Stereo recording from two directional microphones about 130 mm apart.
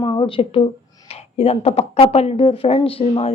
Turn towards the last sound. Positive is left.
turn(degrees=45)  # may be behind; listen again after turning